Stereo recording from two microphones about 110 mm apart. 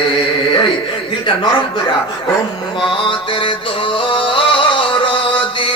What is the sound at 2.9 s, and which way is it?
Mantra, 50° left (ahead or behind).